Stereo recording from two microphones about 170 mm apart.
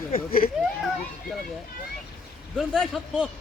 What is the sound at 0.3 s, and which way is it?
Speech, 60° left (ahead or behind).